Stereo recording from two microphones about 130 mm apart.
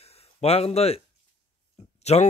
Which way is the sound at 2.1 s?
55° left (ahead or behind).